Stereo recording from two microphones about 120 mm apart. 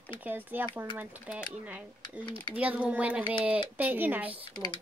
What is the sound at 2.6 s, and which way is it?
Speech, 10° right (ahead or behind).